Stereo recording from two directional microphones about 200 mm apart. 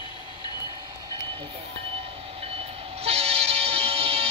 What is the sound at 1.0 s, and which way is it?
Train, 25° right (ahead or behind).